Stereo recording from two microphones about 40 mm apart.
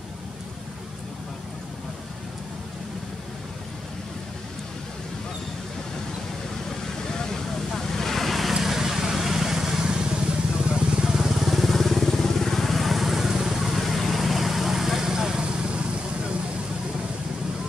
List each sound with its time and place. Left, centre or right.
7.1 s vehicle: centre
8.5 s vehicle: centre
11.1 s vehicle: centre; by 15.8 s right